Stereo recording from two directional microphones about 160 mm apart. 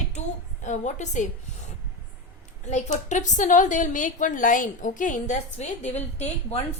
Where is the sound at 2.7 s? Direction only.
50° left (ahead or behind).